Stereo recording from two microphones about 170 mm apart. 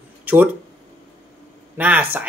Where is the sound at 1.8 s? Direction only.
10° right (ahead or behind).